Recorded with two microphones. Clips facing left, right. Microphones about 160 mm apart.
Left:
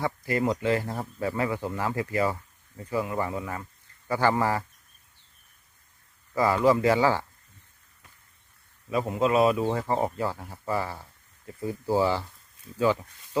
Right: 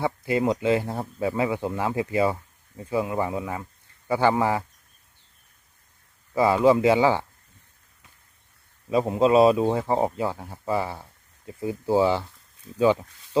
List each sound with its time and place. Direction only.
0.0 s speech: 20° right (ahead or behind)
6.3 s speech: 20° right (ahead or behind)
8.9 s speech: 25° right (ahead or behind)
9.6 s speech: 15° right (ahead or behind)